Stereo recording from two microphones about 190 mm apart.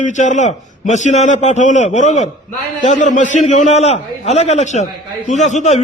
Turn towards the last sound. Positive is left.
turn(degrees=40)  # may be behind; listen again after turning